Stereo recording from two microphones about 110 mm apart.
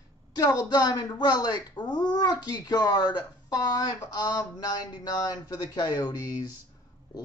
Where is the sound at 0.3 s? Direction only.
40° left (ahead or behind).